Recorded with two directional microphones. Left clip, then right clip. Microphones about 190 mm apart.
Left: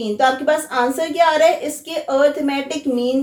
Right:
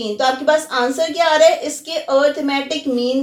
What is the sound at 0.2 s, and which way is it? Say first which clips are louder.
A woman's voice: right 1 dB; 30° left (ahead or behind).